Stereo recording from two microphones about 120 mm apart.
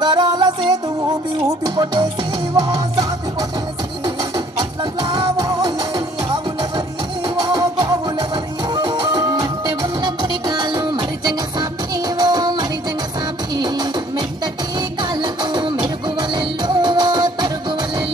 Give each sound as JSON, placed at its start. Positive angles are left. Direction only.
{"t": 0.0, "sound": "music", "side_deg": -40}
{"t": 4.6, "sound": "music", "side_deg": -35}
{"t": 7.2, "sound": "music", "side_deg": -35}